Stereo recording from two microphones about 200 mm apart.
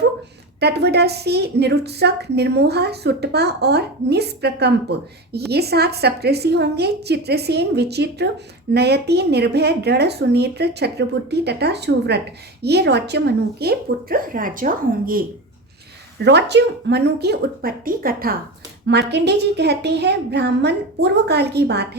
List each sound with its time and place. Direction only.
0.6 s a woman's voice: 55° right (ahead or behind)
16.2 s speech: 60° right (ahead or behind)
18.9 s a woman's voice: 55° right (ahead or behind)